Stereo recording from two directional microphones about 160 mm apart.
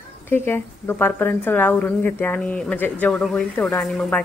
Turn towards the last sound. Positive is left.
turn(degrees=5)  # may be behind; listen again after turning